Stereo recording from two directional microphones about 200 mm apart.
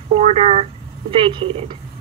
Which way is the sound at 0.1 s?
30° right (ahead or behind).